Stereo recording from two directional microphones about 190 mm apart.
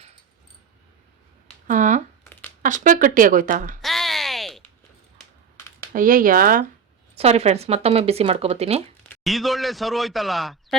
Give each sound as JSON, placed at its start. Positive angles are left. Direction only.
{"t": 1.6, "sound": "speech", "side_deg": -40}
{"t": 3.8, "sound": "a sound", "side_deg": 0}
{"t": 5.9, "sound": "speech", "side_deg": -45}
{"t": 7.2, "sound": "speech", "side_deg": -35}
{"t": 9.2, "sound": "speech", "side_deg": 0}